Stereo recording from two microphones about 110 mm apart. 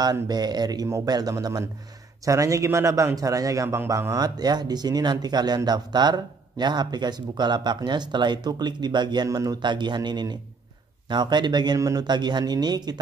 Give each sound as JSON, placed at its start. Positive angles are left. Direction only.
{"t": 0.0, "sound": "a man's voice", "side_deg": -40}